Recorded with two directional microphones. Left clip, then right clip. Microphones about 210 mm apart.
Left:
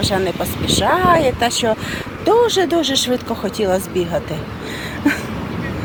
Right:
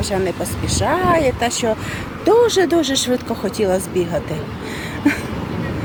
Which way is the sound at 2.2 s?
15° right (ahead or behind).